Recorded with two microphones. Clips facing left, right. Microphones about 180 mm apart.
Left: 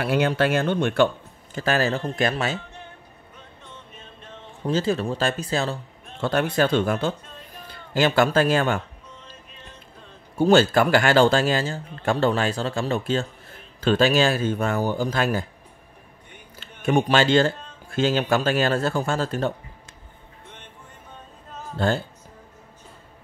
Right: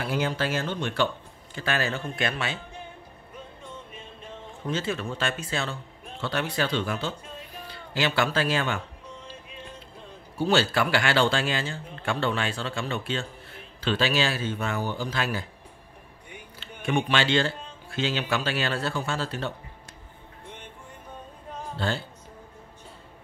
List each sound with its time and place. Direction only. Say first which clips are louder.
0.0 s speech: left 6 dB; 65° left (ahead or behind); by 2.6 s 40° left (ahead or behind)
3.6 s music: right 3 dB; 10° right (ahead or behind)
4.6 s speech: left 7 dB; 35° left (ahead or behind)
6.2 s a man's voice: left 7 dB; 50° left (ahead or behind)
10.3 s speech: left 7 dB; 45° left (ahead or behind)
16.5 s speech: left 6 dB; 45° left (ahead or behind)
21.7 s speech: left 7 dB; 45° left (ahead or behind)